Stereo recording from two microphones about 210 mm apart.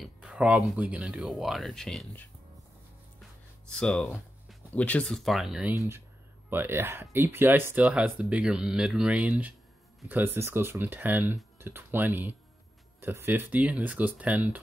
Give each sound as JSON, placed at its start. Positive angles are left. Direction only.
{"t": 0.0, "sound": "speech", "side_deg": -5}